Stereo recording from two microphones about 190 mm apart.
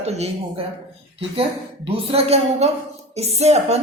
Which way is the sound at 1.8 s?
30° right (ahead or behind).